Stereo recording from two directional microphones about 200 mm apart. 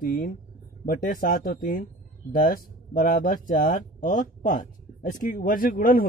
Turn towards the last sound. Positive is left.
turn(degrees=45)  # may be behind; listen again after turning